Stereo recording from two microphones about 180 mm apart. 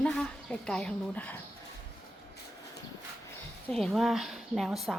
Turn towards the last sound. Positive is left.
turn(degrees=0)  # may be behind; listen again after turning